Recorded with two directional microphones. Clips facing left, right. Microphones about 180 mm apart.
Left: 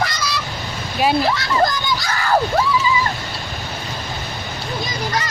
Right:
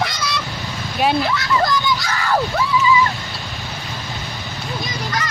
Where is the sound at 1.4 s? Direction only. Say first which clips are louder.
Left 1 dB; 35° left (ahead or behind).